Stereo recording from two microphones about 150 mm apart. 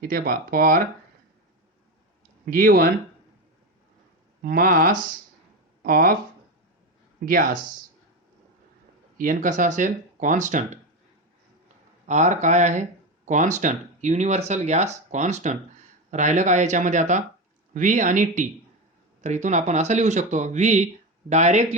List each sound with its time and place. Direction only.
0.1 s speech: 75° right (ahead or behind)
2.5 s speech: 70° right (ahead or behind)
4.4 s speech: 70° right (ahead or behind)
7.3 s speech: 70° right (ahead or behind)
9.1 s speech: 60° right (ahead or behind)
12.0 s speech: 55° right (ahead or behind)